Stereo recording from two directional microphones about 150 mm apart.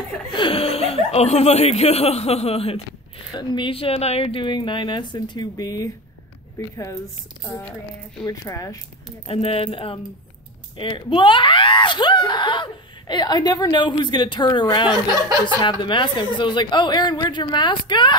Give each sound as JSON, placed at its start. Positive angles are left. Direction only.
{"t": 0.3, "sound": "speech", "side_deg": 35}
{"t": 7.4, "sound": "speech", "side_deg": 20}
{"t": 9.3, "sound": "speech", "side_deg": 40}